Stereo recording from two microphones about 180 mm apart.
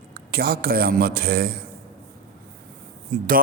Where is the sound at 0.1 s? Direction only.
60° right (ahead or behind).